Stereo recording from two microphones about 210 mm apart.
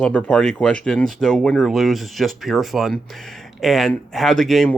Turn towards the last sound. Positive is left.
turn(degrees=0)  # may be behind; listen again after turning